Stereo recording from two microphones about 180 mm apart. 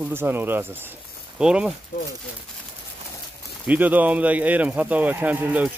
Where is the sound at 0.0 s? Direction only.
10° right (ahead or behind).